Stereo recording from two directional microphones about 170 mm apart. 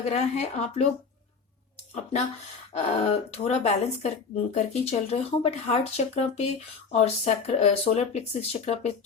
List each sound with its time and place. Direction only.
0.1 s speech: 40° left (ahead or behind)
2.7 s speech: 35° left (ahead or behind)